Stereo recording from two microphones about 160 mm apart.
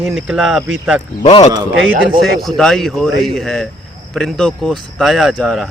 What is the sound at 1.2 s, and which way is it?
Speech, 40° left (ahead or behind).